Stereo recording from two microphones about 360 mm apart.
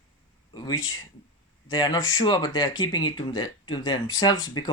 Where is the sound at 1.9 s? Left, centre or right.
Left.